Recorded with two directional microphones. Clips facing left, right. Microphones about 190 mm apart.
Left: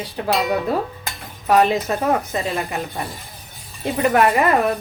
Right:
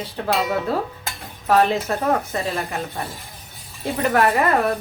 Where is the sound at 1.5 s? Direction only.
15° left (ahead or behind).